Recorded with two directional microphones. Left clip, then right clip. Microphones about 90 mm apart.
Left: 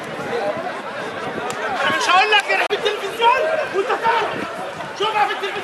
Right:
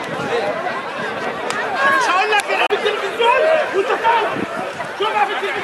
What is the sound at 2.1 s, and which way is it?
Chatter, 20° left (ahead or behind).